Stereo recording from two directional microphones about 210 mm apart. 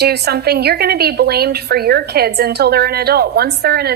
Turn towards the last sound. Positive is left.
turn(degrees=-50)  # may be behind; listen again after turning